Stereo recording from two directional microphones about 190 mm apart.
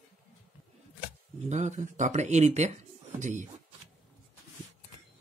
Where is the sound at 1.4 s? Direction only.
40° right (ahead or behind).